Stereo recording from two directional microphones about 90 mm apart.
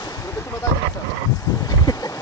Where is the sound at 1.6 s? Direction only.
45° left (ahead or behind).